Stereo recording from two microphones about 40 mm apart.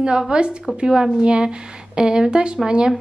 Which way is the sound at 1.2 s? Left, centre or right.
Right.